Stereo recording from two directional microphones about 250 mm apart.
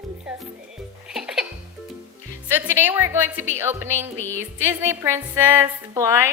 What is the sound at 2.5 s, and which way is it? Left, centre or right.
Music, centre.